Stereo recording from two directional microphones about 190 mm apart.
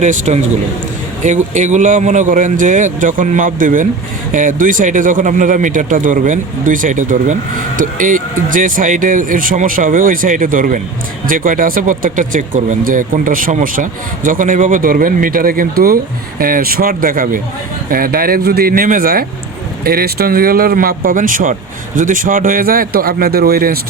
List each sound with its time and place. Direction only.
0.0 s a man's voice: 40° right (ahead or behind)